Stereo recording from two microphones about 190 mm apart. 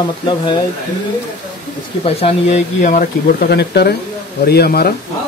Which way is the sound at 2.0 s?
35° left (ahead or behind).